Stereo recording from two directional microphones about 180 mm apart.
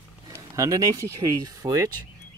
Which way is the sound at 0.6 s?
20° right (ahead or behind).